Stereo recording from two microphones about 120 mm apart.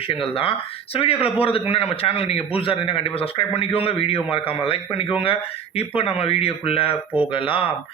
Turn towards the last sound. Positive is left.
turn(degrees=50)  # may be behind; listen again after turning